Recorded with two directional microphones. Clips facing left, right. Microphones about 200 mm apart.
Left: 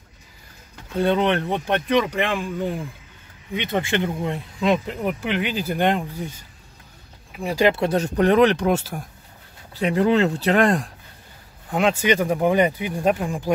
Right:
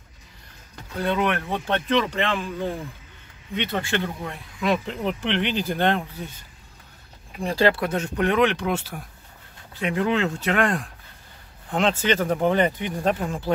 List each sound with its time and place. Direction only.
0.9 s speech: 30° left (ahead or behind)
1.7 s speech: 15° left (ahead or behind)
3.5 s speech: 15° left (ahead or behind)
4.8 s speech: 5° left (ahead or behind)
7.8 s speech: 35° left (ahead or behind)
11.7 s speech: 10° left (ahead or behind)